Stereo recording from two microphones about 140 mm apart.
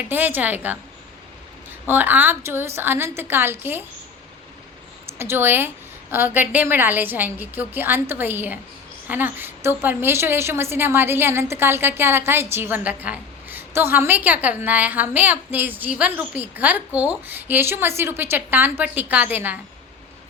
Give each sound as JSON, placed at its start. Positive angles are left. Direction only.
{"t": 0.1, "sound": "a woman's voice", "side_deg": -15}
{"t": 1.9, "sound": "a woman's voice", "side_deg": -15}
{"t": 5.1, "sound": "a woman's voice", "side_deg": -15}